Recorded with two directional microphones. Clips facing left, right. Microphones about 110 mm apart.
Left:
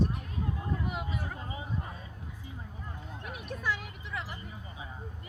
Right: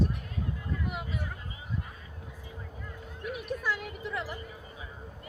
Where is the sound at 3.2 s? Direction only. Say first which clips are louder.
Right 5 dB; centre (ahead or behind).